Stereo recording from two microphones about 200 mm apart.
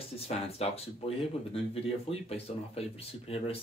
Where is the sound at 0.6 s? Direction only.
30° left (ahead or behind).